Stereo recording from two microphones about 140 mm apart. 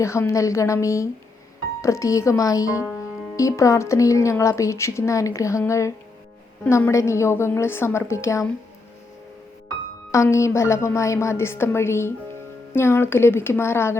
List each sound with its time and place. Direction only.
0.0 s speech: 20° left (ahead or behind)
10.1 s a woman's voice: 20° left (ahead or behind)